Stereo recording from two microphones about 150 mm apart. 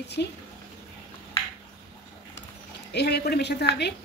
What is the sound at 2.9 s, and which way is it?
Speech, 90° left.